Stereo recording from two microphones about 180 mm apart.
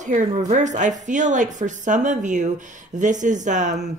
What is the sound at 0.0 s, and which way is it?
A woman's voice, 40° right (ahead or behind).